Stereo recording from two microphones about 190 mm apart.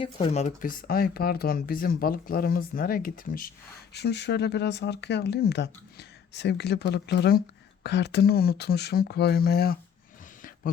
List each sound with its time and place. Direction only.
0.0 s speech: 30° left (ahead or behind); by 3.5 s 45° left (ahead or behind)
3.9 s speech: 65° left (ahead or behind)